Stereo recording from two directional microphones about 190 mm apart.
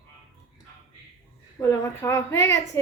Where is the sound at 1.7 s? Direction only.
15° left (ahead or behind).